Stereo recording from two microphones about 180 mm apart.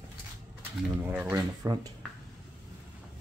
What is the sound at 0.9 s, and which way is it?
Speech, 15° right (ahead or behind).